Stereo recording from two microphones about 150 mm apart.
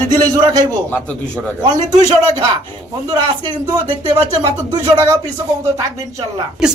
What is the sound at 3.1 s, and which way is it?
Speech, 30° right (ahead or behind).